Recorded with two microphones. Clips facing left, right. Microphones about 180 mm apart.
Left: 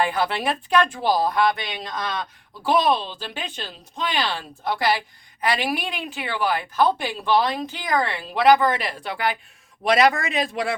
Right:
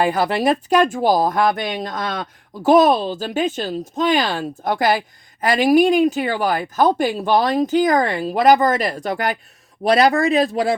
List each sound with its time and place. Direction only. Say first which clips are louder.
0.0 s speech: right 5 dB; 40° right (ahead or behind)